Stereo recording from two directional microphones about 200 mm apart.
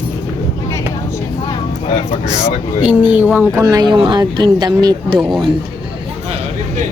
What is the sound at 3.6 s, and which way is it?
Speech, 20° right (ahead or behind).